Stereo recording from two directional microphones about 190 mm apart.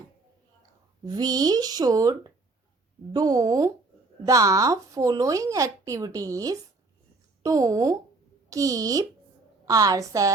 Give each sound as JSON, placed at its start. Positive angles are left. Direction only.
{"t": 1.0, "sound": "speech", "side_deg": -20}